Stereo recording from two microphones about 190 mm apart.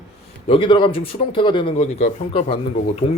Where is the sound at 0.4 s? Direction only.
25° left (ahead or behind).